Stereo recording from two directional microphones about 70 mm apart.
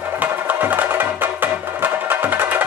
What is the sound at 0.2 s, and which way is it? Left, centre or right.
Music, right.